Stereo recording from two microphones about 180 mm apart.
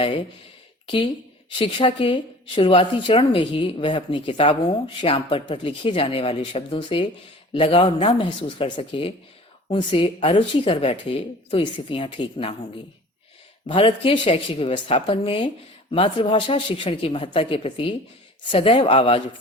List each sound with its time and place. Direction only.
1.5 s a woman's voice: 30° left (ahead or behind)
13.7 s a woman's voice: 30° left (ahead or behind)